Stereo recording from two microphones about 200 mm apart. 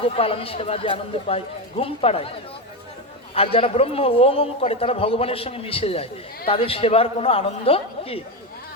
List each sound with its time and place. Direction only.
0.0 s a man's voice: 30° left (ahead or behind)
3.3 s a man's voice: 30° left (ahead or behind)